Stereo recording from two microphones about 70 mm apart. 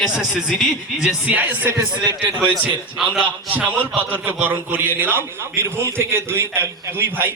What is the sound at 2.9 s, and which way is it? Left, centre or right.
Speech, centre.